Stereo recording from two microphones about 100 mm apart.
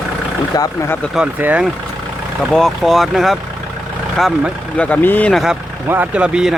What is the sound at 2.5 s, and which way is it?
Speech, centre (ahead or behind).